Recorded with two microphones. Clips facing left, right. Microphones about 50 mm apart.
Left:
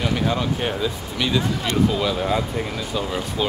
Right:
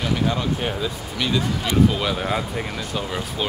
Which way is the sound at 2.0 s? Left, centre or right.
Right.